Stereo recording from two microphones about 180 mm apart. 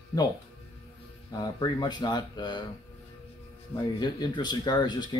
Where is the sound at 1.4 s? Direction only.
25° left (ahead or behind).